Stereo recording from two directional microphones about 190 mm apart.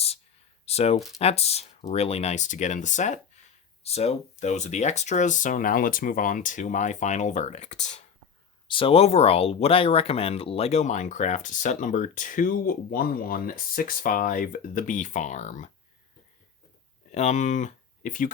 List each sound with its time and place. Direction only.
0.6 s a sound: 35° left (ahead or behind)
0.9 s speech: centre (ahead or behind)
1.2 s speech: 35° left (ahead or behind)
8.6 s speech: 25° left (ahead or behind)
17.1 s speech: 35° left (ahead or behind)